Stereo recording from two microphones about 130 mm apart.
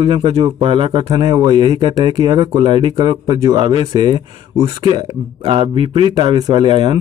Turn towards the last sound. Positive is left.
turn(degrees=-35)  # may be behind; listen again after turning